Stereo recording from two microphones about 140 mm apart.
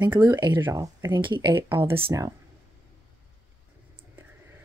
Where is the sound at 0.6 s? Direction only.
15° right (ahead or behind).